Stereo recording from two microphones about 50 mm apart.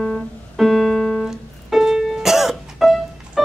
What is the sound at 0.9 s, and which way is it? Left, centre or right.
Music, centre.